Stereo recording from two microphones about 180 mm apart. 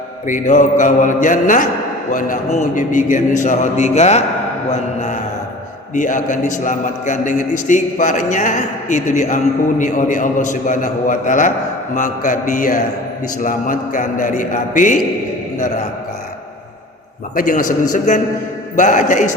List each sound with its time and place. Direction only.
0.3 s a man's voice: 45° left (ahead or behind)
4.7 s mantra: 40° left (ahead or behind)
5.9 s a man's voice: 45° left (ahead or behind)
17.3 s a man's voice: 45° left (ahead or behind)
17.9 s mantra: 40° left (ahead or behind)
18.8 s a man's voice: 45° left (ahead or behind)